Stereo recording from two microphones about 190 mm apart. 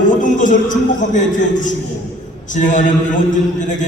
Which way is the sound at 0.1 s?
40° left (ahead or behind).